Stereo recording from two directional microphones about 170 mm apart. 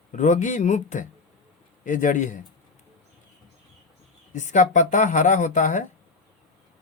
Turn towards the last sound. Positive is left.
turn(degrees=50)  # may be behind; listen again after turning